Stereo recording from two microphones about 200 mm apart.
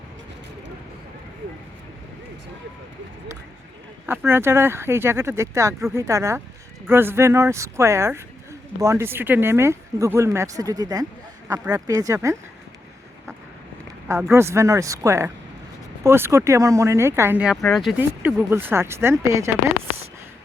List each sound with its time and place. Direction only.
4.0 s speech: 10° right (ahead or behind)
14.1 s speech: 10° right (ahead or behind)